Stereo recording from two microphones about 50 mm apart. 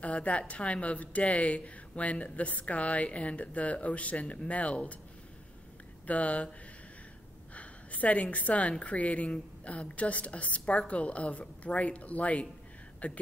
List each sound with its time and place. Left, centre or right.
0.0 s a woman's voice: left
6.0 s a woman's voice: left
7.5 s a woman's voice: left